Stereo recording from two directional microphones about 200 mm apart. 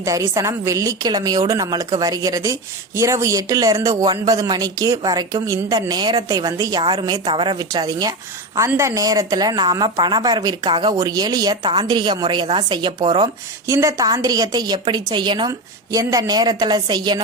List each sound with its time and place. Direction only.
0.0 s a woman's voice: 15° right (ahead or behind)